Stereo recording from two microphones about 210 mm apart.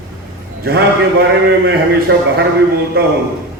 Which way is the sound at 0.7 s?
45° right (ahead or behind).